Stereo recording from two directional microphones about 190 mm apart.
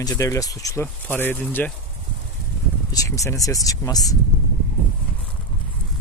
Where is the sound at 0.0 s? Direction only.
15° left (ahead or behind).